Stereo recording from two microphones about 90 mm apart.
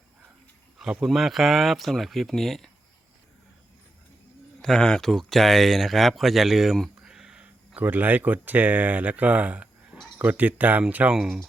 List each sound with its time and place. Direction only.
1.0 s speech: centre (ahead or behind)
4.6 s speech: 5° left (ahead or behind)